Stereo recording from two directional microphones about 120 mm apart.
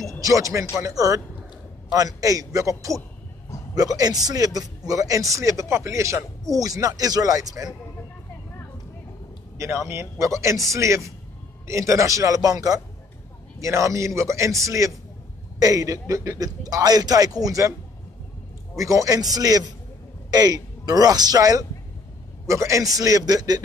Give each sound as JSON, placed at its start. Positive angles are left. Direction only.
{"t": 0.2, "sound": "speech", "side_deg": -25}
{"t": 9.6, "sound": "speech", "side_deg": -25}
{"t": 18.9, "sound": "speech", "side_deg": -30}